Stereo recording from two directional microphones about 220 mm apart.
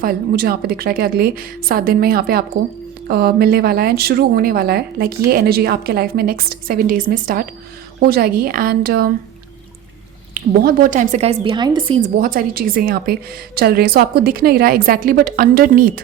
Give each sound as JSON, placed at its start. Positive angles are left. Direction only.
{"t": 0.0, "sound": "a woman's voice", "side_deg": -40}
{"t": 10.3, "sound": "a woman's voice", "side_deg": -40}
{"t": 12.0, "sound": "a woman's voice", "side_deg": -40}